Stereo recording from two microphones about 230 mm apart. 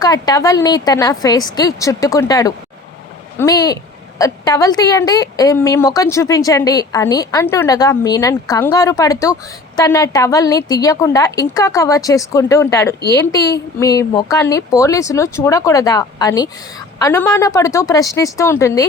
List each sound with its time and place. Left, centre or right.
0.0 s a woman's voice: centre